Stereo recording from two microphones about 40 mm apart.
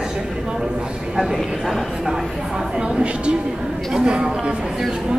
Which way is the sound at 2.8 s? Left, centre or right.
Right.